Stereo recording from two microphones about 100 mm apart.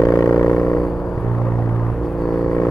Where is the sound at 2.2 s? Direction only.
Centre (ahead or behind).